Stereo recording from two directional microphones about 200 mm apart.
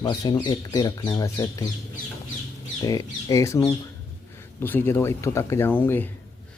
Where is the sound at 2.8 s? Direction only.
20° left (ahead or behind).